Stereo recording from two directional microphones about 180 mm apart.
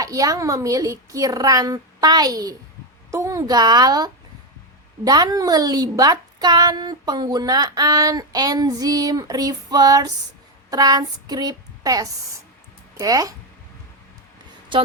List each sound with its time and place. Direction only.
0.0 s a woman's voice: 20° right (ahead or behind)
14.7 s a woman's voice: 30° right (ahead or behind)